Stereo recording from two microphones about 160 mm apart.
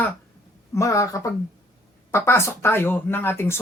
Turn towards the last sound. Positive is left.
turn(degrees=15)  # may be behind; listen again after turning